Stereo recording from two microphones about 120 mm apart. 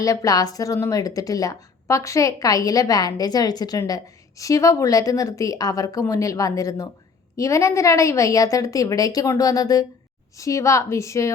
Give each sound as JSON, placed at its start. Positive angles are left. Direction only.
{"t": 0.0, "sound": "speech", "side_deg": 30}